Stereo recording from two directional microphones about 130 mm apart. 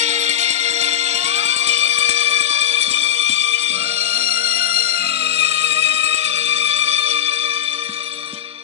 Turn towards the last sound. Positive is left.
turn(degrees=-50)  # may be behind; listen again after turning